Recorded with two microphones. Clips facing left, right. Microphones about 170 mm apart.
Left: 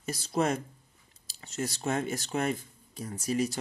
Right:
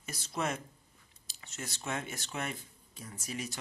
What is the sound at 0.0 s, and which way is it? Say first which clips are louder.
Speech: left 7 dB; 35° left (ahead or behind).